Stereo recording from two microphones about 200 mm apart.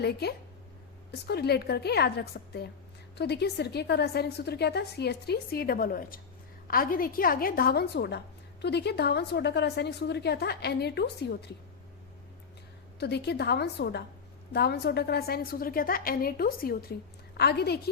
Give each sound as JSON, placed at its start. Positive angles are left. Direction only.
{"t": 0.0, "sound": "a woman's voice", "side_deg": 55}
{"t": 13.0, "sound": "a woman's voice", "side_deg": 55}